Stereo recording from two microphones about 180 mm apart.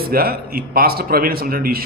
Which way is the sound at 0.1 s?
55° right (ahead or behind).